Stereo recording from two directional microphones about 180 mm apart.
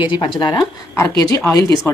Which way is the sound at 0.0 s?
25° left (ahead or behind).